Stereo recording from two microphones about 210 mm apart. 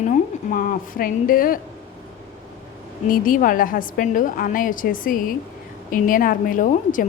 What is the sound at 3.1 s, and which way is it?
A woman's voice, 40° left (ahead or behind).